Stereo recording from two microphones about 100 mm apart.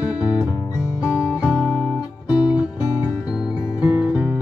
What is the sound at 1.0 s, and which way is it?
Guitar, 30° left (ahead or behind).